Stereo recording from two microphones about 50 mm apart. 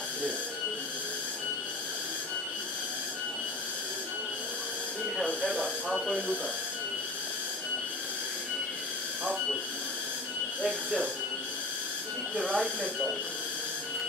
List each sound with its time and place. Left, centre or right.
10.6 s speech: centre
12.4 s speech: centre